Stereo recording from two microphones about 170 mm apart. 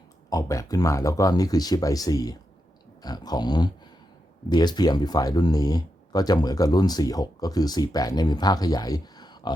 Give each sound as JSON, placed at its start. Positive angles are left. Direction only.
{"t": 0.3, "sound": "speech", "side_deg": 20}